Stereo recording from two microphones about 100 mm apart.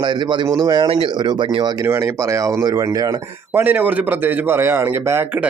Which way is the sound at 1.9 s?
30° right (ahead or behind).